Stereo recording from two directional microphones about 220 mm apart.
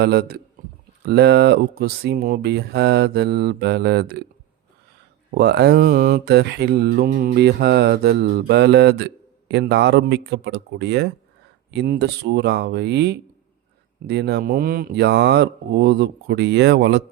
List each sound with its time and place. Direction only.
0.0 s speech: 45° right (ahead or behind)
5.3 s speech: 50° right (ahead or behind)